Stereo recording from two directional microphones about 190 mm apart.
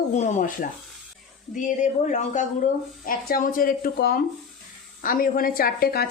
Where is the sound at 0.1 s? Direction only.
40° left (ahead or behind).